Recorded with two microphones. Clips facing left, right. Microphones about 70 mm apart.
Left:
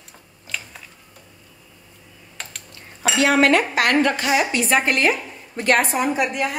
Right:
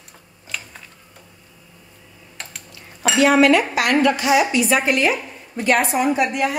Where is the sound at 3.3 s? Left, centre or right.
Left.